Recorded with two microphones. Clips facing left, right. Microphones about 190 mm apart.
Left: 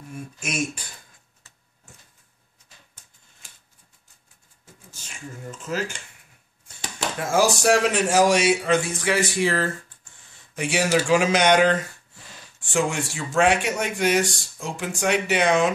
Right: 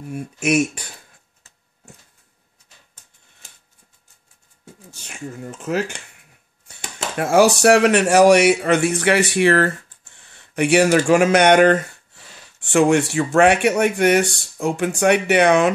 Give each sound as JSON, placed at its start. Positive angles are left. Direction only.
{"t": 0.1, "sound": "speech", "side_deg": -70}
{"t": 4.9, "sound": "speech", "side_deg": -65}
{"t": 12.5, "sound": "speech", "side_deg": -65}